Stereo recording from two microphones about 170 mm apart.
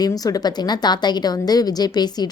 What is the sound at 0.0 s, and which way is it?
A woman's voice, 20° left (ahead or behind).